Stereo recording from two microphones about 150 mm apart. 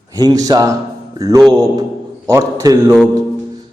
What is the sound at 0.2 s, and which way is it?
A man's voice, 25° right (ahead or behind).